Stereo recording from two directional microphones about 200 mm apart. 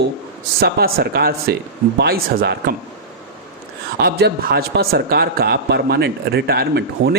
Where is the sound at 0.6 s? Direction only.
50° right (ahead or behind).